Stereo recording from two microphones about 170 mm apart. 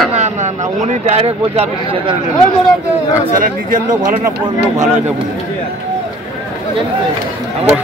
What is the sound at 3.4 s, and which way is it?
Speech, 55° right (ahead or behind).